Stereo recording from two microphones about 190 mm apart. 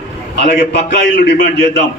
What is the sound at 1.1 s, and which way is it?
Speech, 65° left (ahead or behind).